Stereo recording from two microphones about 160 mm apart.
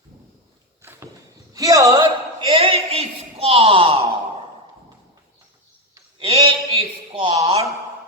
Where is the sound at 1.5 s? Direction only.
20° right (ahead or behind).